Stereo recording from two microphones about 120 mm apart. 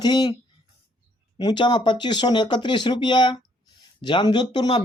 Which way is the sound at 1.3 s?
40° left (ahead or behind).